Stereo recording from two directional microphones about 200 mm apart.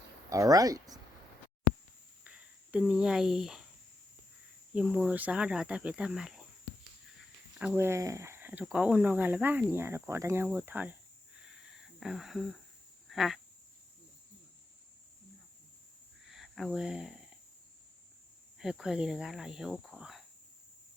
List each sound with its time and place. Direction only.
0.3 s speech: 15° right (ahead or behind)
2.2 s a sound: 5° right (ahead or behind)
4.7 s speech: 5° right (ahead or behind)
7.6 s speech: 10° right (ahead or behind)
11.4 s a sound: 5° right (ahead or behind)
13.1 s speech: centre (ahead or behind)
16.3 s speech: centre (ahead or behind)
18.6 s speech: 5° right (ahead or behind)